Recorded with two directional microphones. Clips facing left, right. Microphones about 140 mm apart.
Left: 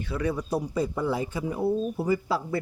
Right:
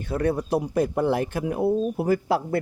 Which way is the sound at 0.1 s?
55° right (ahead or behind).